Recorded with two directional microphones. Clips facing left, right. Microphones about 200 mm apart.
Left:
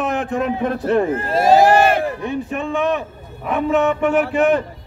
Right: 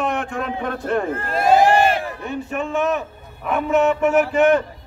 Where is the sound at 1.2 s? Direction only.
40° left (ahead or behind).